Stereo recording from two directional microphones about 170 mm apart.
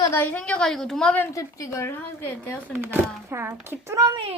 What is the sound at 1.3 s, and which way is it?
A woman's voice, 20° left (ahead or behind).